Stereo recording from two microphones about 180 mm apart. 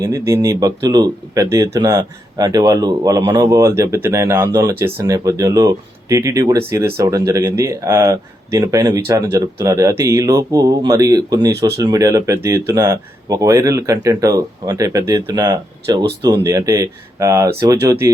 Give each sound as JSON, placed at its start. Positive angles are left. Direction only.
{"t": 0.0, "sound": "speech", "side_deg": -15}